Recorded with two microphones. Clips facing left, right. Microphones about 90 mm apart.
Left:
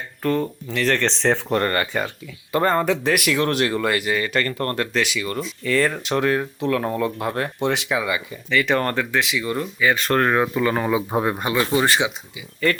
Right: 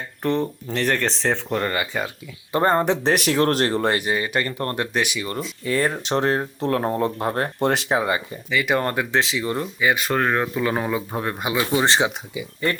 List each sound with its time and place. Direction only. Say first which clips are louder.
0.2 s speech: left 1 dB; 25° right (ahead or behind)
0.9 s speech: left 2 dB; 5° right (ahead or behind)
2.5 s speech: even; 25° right (ahead or behind)
8.4 s speech: left 1 dB; 10° right (ahead or behind)
9.1 s speech: even; 30° right (ahead or behind)
9.9 s speech: left 3 dB; 5° right (ahead or behind)
11.1 s speech: left 5 dB; 15° left (ahead or behind)
11.3 s speech: left 1 dB; 15° right (ahead or behind)